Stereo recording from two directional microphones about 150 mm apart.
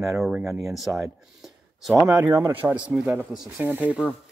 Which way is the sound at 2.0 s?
15° right (ahead or behind).